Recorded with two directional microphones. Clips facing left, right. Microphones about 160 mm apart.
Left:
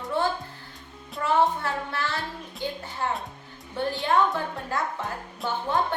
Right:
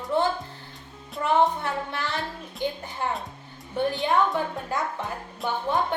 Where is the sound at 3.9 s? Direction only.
20° right (ahead or behind).